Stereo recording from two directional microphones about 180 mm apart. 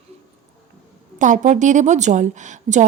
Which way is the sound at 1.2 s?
45° right (ahead or behind).